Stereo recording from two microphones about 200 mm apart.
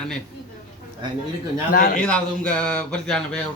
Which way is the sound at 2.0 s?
5° left (ahead or behind).